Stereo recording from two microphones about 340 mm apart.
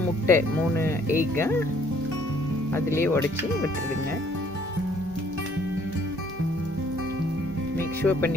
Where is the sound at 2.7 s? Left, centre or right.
Centre.